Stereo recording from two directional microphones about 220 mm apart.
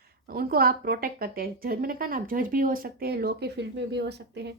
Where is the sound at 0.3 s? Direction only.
45° right (ahead or behind).